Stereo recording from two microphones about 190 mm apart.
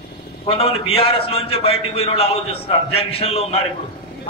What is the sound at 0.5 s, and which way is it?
A man's voice, 30° left (ahead or behind).